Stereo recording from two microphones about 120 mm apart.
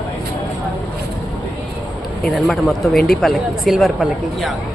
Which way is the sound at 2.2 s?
Centre (ahead or behind).